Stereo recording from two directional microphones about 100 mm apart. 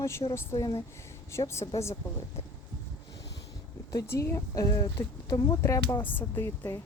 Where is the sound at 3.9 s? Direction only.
30° left (ahead or behind).